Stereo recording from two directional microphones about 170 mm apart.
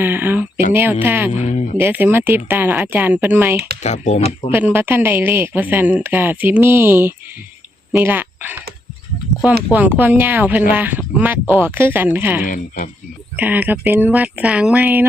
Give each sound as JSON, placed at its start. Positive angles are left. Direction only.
{"t": 0.0, "sound": "speech", "side_deg": -10}
{"t": 1.4, "sound": "speech", "side_deg": 40}
{"t": 1.8, "sound": "speech", "side_deg": -10}
{"t": 3.8, "sound": "speech", "side_deg": 40}
{"t": 4.5, "sound": "speech", "side_deg": -10}
{"t": 10.0, "sound": "speech", "side_deg": -10}
{"t": 12.5, "sound": "speech", "side_deg": 50}
{"t": 13.3, "sound": "speech", "side_deg": -10}